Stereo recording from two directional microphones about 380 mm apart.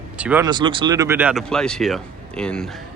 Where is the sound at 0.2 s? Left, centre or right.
Centre.